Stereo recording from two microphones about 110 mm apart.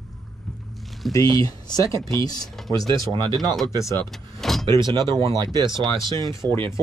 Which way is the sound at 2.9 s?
45° right (ahead or behind).